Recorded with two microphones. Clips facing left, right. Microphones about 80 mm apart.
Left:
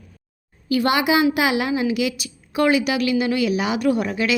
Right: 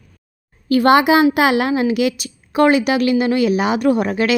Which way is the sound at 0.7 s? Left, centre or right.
Right.